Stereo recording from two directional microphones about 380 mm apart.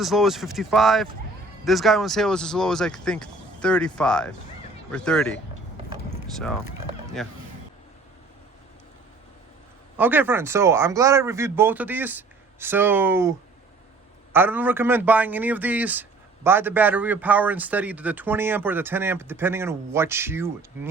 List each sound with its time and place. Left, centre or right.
0.0 s a man's voice: centre
7.2 s a man's voice: centre
10.0 s a man's voice: centre
14.3 s a man's voice: centre